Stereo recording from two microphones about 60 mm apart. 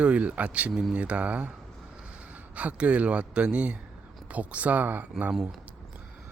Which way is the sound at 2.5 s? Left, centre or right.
Right.